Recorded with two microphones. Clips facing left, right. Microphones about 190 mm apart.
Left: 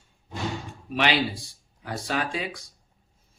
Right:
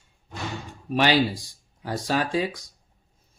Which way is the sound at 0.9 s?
40° right (ahead or behind).